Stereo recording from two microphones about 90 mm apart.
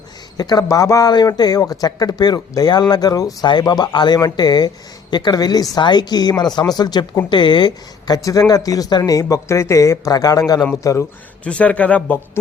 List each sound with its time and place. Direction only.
0.3 s speech: 45° left (ahead or behind)
11.4 s speech: 15° left (ahead or behind)